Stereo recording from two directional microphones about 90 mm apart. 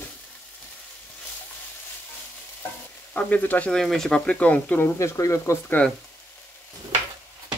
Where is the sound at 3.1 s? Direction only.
15° left (ahead or behind).